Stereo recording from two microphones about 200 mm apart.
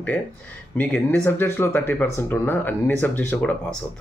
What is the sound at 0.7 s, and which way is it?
Speech, 10° left (ahead or behind).